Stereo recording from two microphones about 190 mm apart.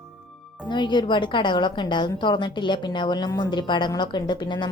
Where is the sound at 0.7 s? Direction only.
25° left (ahead or behind).